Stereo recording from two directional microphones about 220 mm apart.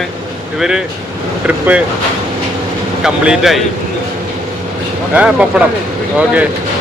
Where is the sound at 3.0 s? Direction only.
5° right (ahead or behind).